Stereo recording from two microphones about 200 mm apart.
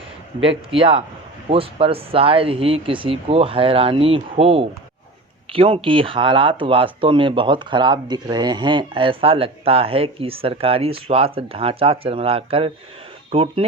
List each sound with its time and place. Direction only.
0.4 s speech: 25° right (ahead or behind)